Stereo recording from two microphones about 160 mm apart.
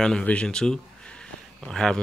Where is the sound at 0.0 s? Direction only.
5° left (ahead or behind).